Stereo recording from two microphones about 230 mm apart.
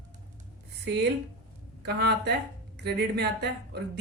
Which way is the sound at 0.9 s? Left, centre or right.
Right.